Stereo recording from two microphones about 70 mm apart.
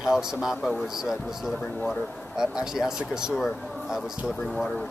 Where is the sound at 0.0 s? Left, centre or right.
Centre.